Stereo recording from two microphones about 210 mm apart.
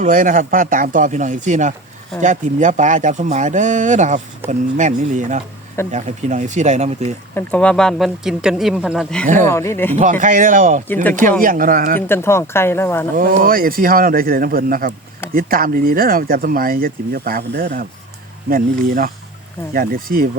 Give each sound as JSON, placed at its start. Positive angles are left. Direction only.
{"t": 0.0, "sound": "speech", "side_deg": -40}
{"t": 7.3, "sound": "speech", "side_deg": 5}
{"t": 9.2, "sound": "speech", "side_deg": -35}
{"t": 9.5, "sound": "speech", "side_deg": 10}
{"t": 9.9, "sound": "speech", "side_deg": -35}
{"t": 11.9, "sound": "speech", "side_deg": 10}
{"t": 13.1, "sound": "speech", "side_deg": -40}